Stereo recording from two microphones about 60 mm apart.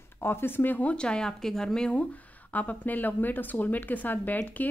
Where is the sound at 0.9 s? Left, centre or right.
Centre.